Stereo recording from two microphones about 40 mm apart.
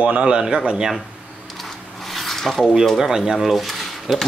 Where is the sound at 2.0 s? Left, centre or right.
Centre.